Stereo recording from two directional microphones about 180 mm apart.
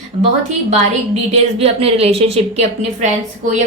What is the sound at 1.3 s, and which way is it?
Speech, 35° right (ahead or behind).